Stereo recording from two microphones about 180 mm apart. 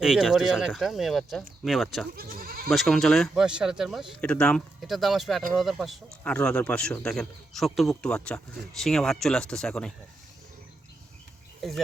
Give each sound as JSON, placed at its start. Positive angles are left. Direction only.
{"t": 0.0, "sound": "speech", "side_deg": -5}
{"t": 2.1, "sound": "goat", "side_deg": -55}
{"t": 2.6, "sound": "speech", "side_deg": 0}